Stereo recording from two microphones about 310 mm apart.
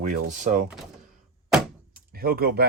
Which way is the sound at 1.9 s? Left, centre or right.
Right.